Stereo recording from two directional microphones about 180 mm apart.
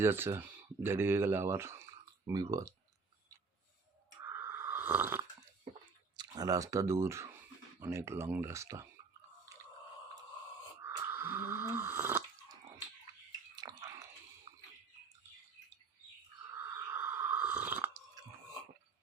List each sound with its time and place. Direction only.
0.0 s speech: 15° right (ahead or behind)
4.2 s snoring: 10° right (ahead or behind)
6.1 s speech: 20° right (ahead or behind)
10.8 s drip: 15° right (ahead or behind)
13.6 s chewing: 20° right (ahead or behind)
16.6 s a sound: 15° right (ahead or behind)